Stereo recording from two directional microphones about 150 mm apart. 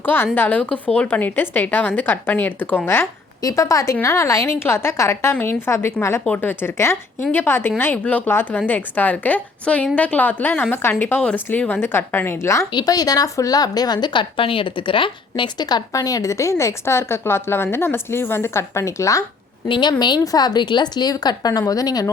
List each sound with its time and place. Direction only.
0.0 s a woman's voice: 15° left (ahead or behind)
19.6 s a woman's voice: 30° left (ahead or behind)